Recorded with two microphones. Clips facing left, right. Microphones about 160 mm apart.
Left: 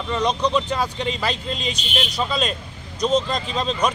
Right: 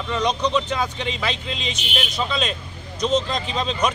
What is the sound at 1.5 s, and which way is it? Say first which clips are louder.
Speech: left 2 dB; 40° left (ahead or behind).